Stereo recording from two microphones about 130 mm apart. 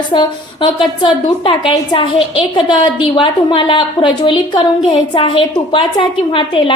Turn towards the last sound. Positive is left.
turn(degrees=40)  # may be behind; listen again after turning